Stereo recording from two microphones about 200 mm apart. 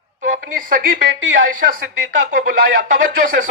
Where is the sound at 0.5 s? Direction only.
45° right (ahead or behind).